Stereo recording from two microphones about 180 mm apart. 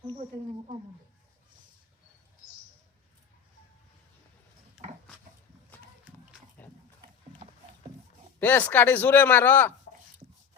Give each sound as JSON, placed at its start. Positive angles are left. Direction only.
{"t": 4.8, "sound": "pig", "side_deg": -40}
{"t": 6.1, "sound": "pig", "side_deg": -10}
{"t": 6.6, "sound": "dog", "side_deg": 10}
{"t": 8.4, "sound": "speech", "side_deg": 10}